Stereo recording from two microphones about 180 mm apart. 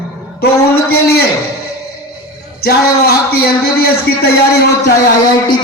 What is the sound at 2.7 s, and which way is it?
A man's voice, 60° left (ahead or behind).